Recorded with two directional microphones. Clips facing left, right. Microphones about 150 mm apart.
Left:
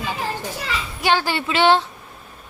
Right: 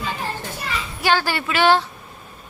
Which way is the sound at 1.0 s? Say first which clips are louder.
Even; 20° left (ahead or behind).